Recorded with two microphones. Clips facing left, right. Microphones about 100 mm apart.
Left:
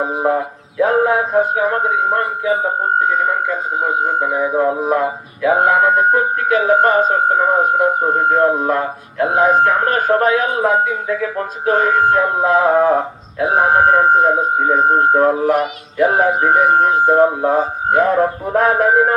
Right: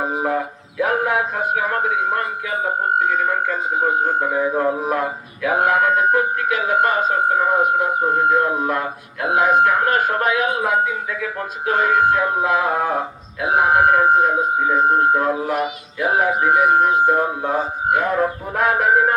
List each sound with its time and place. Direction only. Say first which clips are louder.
0.8 s speech: left 5 dB; 30° left (ahead or behind)
4.0 s speech: left 2 dB; 20° left (ahead or behind); by 19.1 s 35° left (ahead or behind)